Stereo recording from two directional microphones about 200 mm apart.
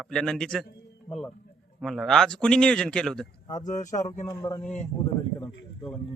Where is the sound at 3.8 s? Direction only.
35° left (ahead or behind).